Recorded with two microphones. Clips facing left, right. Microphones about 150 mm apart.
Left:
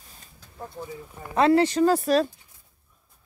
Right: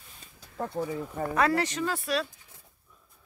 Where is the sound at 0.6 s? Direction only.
85° right.